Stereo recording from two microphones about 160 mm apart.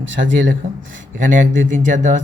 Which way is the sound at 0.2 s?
65° right (ahead or behind).